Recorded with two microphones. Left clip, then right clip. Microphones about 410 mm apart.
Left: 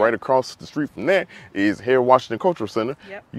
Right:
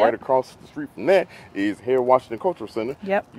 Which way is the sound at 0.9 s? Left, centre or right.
Left.